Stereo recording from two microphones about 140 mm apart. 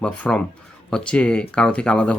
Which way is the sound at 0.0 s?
5° left (ahead or behind).